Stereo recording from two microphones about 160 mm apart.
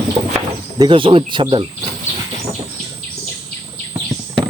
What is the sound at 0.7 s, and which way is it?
Speech, 30° right (ahead or behind).